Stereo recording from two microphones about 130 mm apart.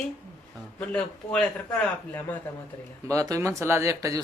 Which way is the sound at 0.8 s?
10° left (ahead or behind).